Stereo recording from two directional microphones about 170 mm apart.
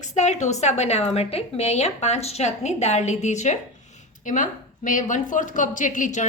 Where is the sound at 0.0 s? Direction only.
45° left (ahead or behind).